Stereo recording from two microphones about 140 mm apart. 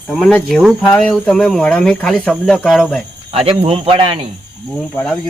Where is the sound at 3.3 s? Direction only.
45° right (ahead or behind).